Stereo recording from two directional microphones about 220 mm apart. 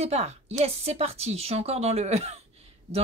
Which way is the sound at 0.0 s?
30° right (ahead or behind).